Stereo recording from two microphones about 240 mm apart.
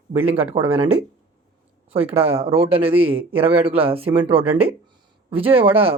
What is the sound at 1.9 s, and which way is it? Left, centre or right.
Speech, right.